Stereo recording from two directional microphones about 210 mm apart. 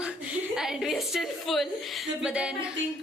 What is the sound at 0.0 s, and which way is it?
A woman's voice, 5° right (ahead or behind).